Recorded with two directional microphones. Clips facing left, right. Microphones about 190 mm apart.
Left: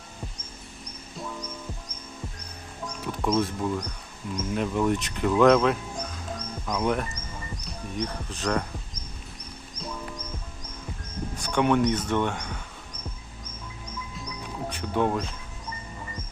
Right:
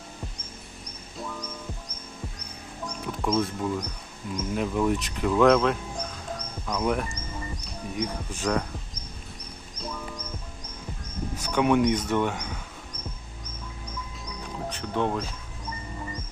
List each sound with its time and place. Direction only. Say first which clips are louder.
3.1 s speech: left 1 dB; centre (ahead or behind)
11.3 s a sound: even; 5° right (ahead or behind)
11.8 s speech: right 1 dB; 10° right (ahead or behind)
14.7 s speech: left 2 dB; 10° left (ahead or behind)